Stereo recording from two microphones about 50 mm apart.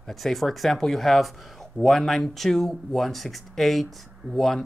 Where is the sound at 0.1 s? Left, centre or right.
Centre.